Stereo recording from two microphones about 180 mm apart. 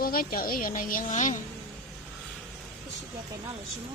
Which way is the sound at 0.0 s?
55° left (ahead or behind).